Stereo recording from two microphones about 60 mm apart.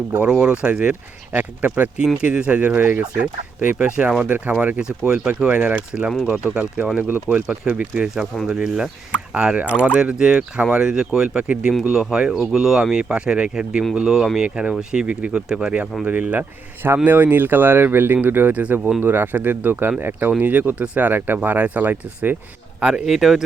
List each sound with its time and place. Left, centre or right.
0.2 s speech: centre
4.8 s speech: centre
6.1 s speech: centre
6.5 s speech: right
15.4 s speech: centre
16.0 s speech: right
22.8 s speech: centre
23.0 s speech: centre